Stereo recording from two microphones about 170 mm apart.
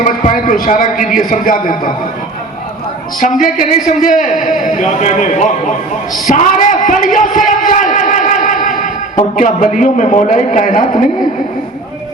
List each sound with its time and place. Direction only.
0.0 s a man's voice: 50° left (ahead or behind)
3.2 s a man's voice: 50° left (ahead or behind)